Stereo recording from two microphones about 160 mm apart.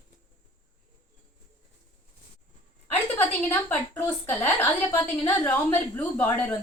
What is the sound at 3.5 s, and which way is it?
A woman's voice, 10° left (ahead or behind).